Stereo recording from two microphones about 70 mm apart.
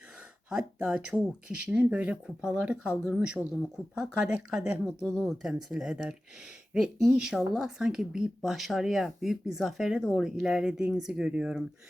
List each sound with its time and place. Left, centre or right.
0.9 s speech: centre